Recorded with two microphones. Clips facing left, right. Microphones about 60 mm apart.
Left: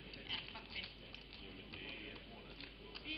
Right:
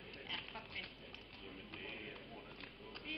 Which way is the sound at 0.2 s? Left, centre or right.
Centre.